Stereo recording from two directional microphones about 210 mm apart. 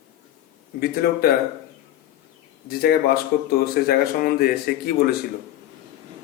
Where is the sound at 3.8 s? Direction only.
50° left (ahead or behind).